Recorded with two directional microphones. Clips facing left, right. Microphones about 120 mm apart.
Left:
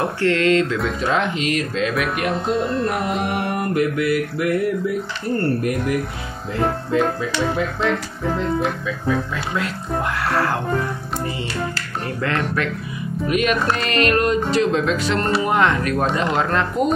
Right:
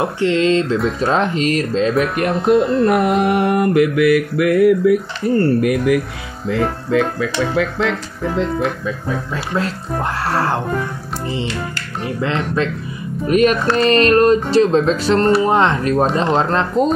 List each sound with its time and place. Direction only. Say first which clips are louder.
0.0 s speech: right 3 dB; 20° right (ahead or behind)
1.0 s music: right 4 dB; 35° right (ahead or behind)
2.1 s music: right 7 dB; centre (ahead or behind)
3.3 s mantra: right 7 dB; 90° right
6.5 s speech: right 3 dB; 85° right
9.3 s music: right 3 dB; 35° right (ahead or behind)
12.2 s speech: right 3 dB; 25° right (ahead or behind)
13.3 s music: right 6 dB; 35° right (ahead or behind)
15.4 s speech: right 3 dB; 30° right (ahead or behind)
16.2 s music: right 4 dB; 30° right (ahead or behind)